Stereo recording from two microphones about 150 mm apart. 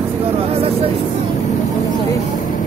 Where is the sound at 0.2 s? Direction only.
40° right (ahead or behind).